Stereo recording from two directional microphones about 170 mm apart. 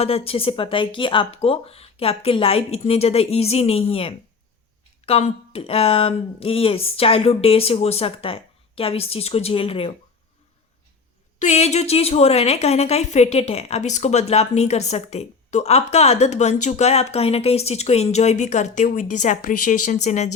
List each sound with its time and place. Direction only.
0.0 s a woman's voice: 35° left (ahead or behind)
11.3 s a woman's voice: 40° left (ahead or behind)